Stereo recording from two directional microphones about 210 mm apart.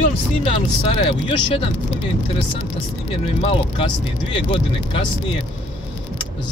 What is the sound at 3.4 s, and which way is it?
Speech, 25° left (ahead or behind).